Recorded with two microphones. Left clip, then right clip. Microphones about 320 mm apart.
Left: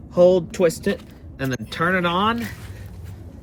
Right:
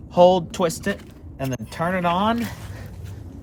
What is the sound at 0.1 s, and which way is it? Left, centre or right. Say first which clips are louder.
Speech: even; centre.